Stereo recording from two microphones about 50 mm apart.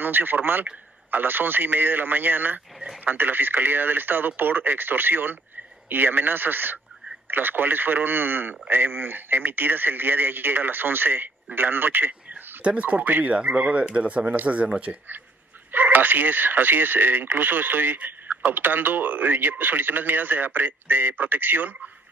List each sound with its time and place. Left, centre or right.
0.0 s a man's voice: right
15.7 s speech: right